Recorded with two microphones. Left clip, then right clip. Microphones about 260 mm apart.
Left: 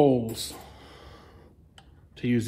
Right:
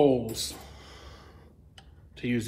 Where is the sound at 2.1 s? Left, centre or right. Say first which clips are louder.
Left 3 dB; left.